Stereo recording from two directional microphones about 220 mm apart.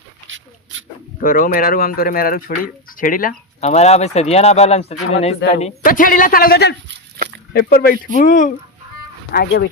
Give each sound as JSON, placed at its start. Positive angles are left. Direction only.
{"t": 0.3, "sound": "dog", "side_deg": -60}
{"t": 1.2, "sound": "a man's voice", "side_deg": 40}